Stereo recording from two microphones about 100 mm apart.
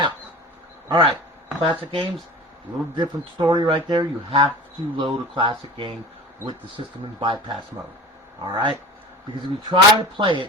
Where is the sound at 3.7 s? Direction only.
60° right (ahead or behind).